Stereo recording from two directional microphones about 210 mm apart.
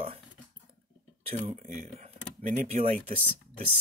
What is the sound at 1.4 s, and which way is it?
Speech, 35° right (ahead or behind).